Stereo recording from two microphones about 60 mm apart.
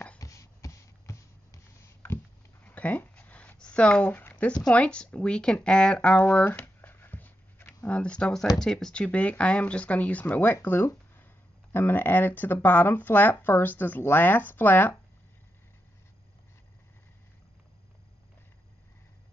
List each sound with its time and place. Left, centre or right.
0.2 s a sound: left
2.6 s a sound: left
3.5 s speech: centre
6.1 s speech: left
6.6 s dog: left
7.8 s speech: centre